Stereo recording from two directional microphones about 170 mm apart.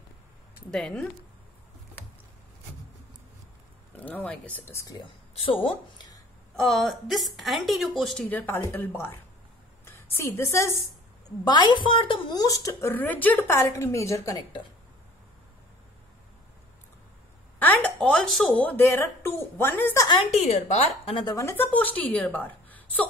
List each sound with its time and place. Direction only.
0.7 s speech: 5° left (ahead or behind)
3.9 s speech: 10° left (ahead or behind)
5.3 s speech: 35° left (ahead or behind)
6.5 s a woman's voice: centre (ahead or behind)
11.4 s a woman's voice: 25° left (ahead or behind)
17.6 s a sound: 10° left (ahead or behind)
18.0 s speech: 5° left (ahead or behind)
20.2 s a woman's voice: 40° left (ahead or behind); by 23.0 s 10° left (ahead or behind)